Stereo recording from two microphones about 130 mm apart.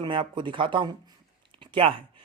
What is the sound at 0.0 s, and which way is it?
Speech, 40° right (ahead or behind).